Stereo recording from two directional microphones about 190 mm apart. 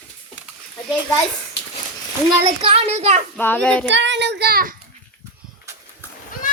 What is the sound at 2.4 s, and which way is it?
Speech, 30° right (ahead or behind).